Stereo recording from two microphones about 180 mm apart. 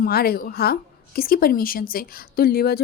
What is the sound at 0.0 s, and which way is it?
A woman's voice, 55° left (ahead or behind).